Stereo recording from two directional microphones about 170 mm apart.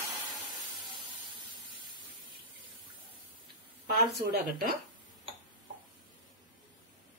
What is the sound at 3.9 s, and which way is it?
Speech, 70° right (ahead or behind).